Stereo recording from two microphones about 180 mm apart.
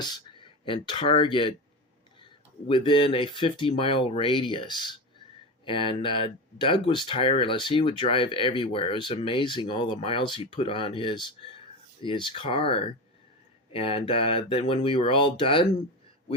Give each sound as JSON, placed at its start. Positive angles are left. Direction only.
{"t": 0.0, "sound": "speech", "side_deg": 25}
{"t": 2.6, "sound": "speech", "side_deg": 30}